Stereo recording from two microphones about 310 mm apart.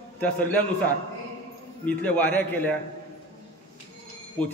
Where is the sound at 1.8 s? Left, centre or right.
Centre.